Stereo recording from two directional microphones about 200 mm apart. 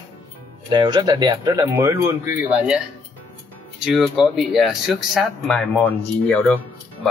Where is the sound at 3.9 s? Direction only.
Centre (ahead or behind).